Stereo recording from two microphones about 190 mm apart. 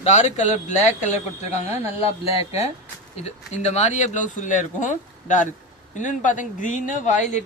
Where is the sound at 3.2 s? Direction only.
35° left (ahead or behind).